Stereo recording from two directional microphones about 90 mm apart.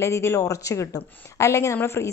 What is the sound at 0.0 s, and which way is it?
A woman's voice, 30° left (ahead or behind).